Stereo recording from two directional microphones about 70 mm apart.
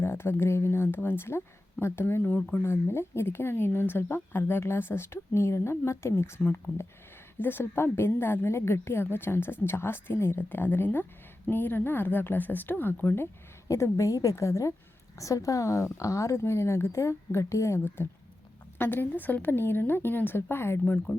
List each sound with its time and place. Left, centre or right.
0.0 s speech: left
7.4 s speech: left
13.7 s a woman's voice: left